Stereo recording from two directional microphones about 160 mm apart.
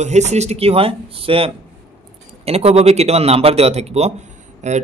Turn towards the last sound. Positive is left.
turn(degrees=-45)  # may be behind; listen again after turning